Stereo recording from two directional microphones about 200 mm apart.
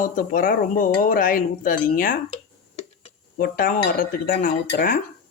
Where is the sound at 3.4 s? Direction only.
45° left (ahead or behind).